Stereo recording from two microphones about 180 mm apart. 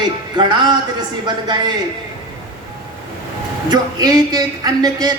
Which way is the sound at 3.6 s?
20° right (ahead or behind).